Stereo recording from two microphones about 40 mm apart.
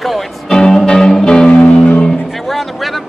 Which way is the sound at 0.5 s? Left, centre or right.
Centre.